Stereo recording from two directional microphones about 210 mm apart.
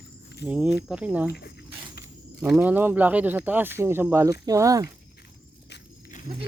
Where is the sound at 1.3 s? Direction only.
50° left (ahead or behind).